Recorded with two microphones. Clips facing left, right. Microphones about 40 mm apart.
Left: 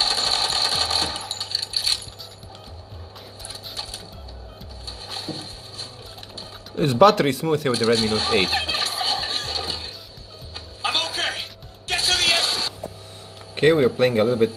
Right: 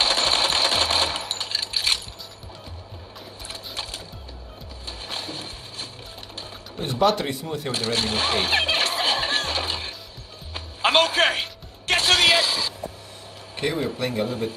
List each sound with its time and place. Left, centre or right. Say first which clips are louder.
0.0 s a sound: right 2 dB; right
1.3 s coin: right 1 dB; right
3.4 s sewing machine: right 1 dB; right
4.8 s a sound: even; right
6.8 s speech: left 6 dB; left
7.9 s speech: even; right
8.5 s music: right 3 dB; right
12.3 s a sound: right 2 dB; centre
13.6 s speech: left 9 dB; left